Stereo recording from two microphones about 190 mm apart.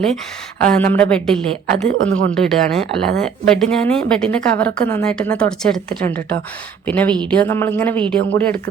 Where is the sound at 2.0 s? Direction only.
90° right.